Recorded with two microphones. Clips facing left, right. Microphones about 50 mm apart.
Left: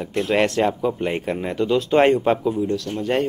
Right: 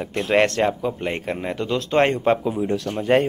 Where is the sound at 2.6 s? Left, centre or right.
Right.